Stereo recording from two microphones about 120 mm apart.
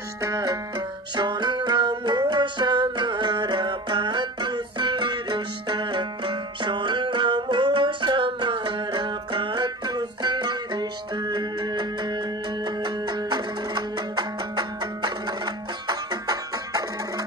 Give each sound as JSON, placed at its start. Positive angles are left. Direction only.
{"t": 0.2, "sound": "music", "side_deg": -30}